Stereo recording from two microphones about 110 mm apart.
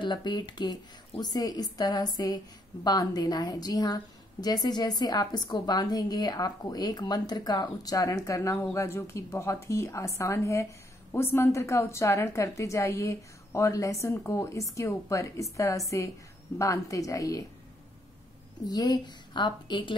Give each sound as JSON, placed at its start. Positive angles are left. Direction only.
{"t": 0.0, "sound": "a woman's voice", "side_deg": 45}
{"t": 18.7, "sound": "a woman's voice", "side_deg": 40}